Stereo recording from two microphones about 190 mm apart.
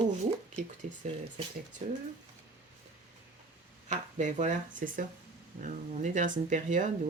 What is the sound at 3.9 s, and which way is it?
Speech, 40° right (ahead or behind).